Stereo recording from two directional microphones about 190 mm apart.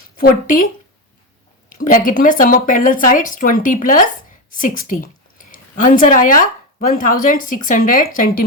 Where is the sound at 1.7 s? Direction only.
50° left (ahead or behind).